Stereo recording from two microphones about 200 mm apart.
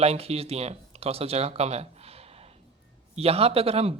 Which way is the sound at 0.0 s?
30° right (ahead or behind).